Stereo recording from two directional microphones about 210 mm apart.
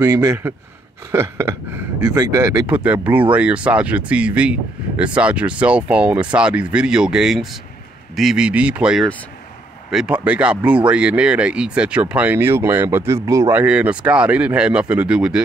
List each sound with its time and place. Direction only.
0.0 s speech: 15° right (ahead or behind)
2.7 s speech: 5° right (ahead or behind)